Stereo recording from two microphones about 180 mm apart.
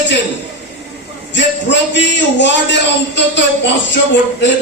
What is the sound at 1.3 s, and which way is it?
A man's voice, 80° left.